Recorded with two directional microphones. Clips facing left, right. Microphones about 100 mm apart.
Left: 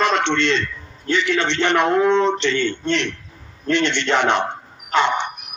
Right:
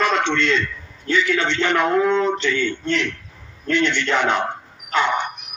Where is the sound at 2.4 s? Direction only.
75° left (ahead or behind).